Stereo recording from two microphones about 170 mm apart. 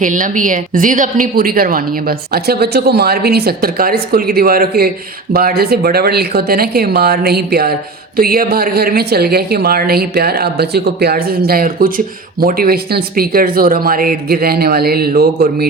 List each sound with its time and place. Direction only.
0.0 s speech: 50° right (ahead or behind)